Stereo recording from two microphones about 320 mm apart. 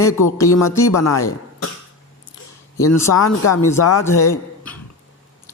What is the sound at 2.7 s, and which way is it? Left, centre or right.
Speech, centre.